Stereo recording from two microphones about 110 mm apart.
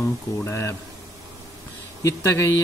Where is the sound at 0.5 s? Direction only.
25° left (ahead or behind).